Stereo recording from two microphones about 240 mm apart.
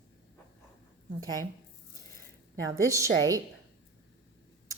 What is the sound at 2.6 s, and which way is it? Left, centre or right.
Speech, centre.